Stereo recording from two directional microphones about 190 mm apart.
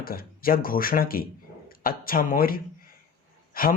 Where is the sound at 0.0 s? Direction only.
50° left (ahead or behind).